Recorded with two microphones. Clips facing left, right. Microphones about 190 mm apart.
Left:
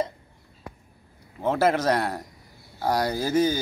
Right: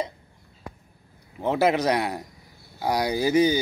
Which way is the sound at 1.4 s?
15° right (ahead or behind).